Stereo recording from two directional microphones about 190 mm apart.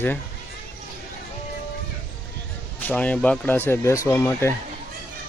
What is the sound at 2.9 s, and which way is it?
Speech, 5° left (ahead or behind).